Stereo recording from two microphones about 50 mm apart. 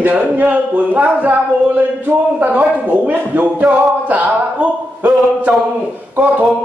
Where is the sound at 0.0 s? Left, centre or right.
Right.